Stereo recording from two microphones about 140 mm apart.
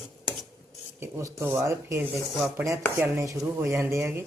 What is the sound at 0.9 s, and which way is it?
A man's voice, 20° right (ahead or behind).